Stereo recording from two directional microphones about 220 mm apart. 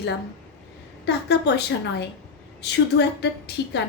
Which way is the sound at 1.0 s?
50° left (ahead or behind).